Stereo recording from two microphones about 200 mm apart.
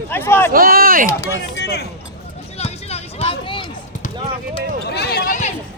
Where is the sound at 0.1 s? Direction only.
10° left (ahead or behind).